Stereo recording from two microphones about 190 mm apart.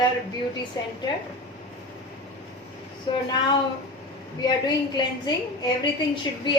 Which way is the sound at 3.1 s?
25° left (ahead or behind).